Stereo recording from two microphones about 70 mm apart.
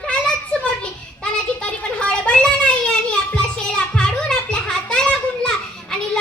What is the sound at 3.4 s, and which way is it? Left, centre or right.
Children playing, centre.